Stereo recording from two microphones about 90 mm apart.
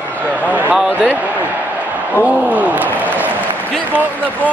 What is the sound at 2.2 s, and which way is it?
Applause, 15° right (ahead or behind).